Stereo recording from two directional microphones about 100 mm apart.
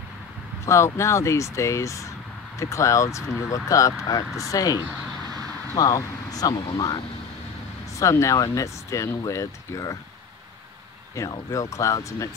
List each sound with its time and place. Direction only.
0.7 s speech: 30° left (ahead or behind)
8.0 s speech: 30° left (ahead or behind)
11.2 s speech: 30° left (ahead or behind)